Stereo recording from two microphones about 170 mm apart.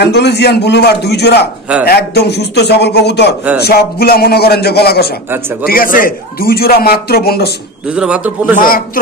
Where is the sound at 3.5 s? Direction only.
65° left (ahead or behind).